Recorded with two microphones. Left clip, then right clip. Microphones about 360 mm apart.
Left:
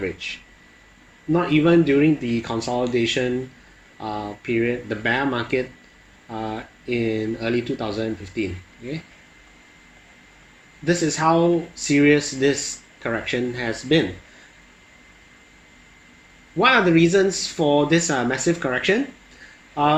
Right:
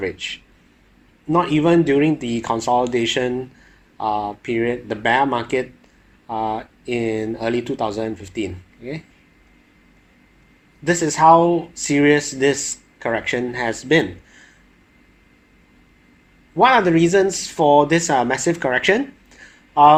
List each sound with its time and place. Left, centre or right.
0.0 s speech: right
1.4 s speech: right
4.4 s speech: right
6.2 s speech: right
6.8 s speech: right
10.8 s speech: right
16.6 s speech: right
17.6 s speech: right
17.8 s speech: right